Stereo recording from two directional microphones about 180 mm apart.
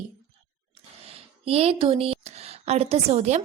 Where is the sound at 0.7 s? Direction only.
35° right (ahead or behind).